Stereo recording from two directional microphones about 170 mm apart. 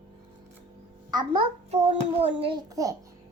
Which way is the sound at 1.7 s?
40° right (ahead or behind).